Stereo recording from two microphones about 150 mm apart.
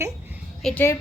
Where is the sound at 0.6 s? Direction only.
15° left (ahead or behind).